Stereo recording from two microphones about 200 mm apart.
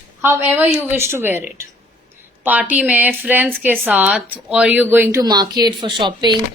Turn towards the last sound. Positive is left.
turn(degrees=-25)  # may be behind; listen again after turning